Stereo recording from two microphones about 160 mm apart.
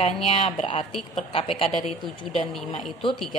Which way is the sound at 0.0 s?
40° left (ahead or behind).